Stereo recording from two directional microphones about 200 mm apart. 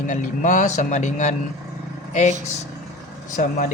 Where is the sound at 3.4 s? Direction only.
40° left (ahead or behind).